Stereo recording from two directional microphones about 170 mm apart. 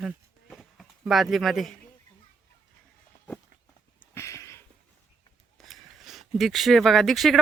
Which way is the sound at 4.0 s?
15° left (ahead or behind).